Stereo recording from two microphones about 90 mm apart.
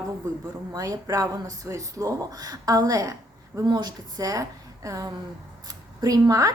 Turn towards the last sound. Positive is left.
turn(degrees=-40)  # may be behind; listen again after turning